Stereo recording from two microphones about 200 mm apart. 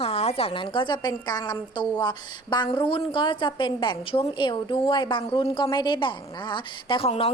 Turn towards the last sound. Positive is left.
turn(degrees=30)  # may be behind; listen again after turning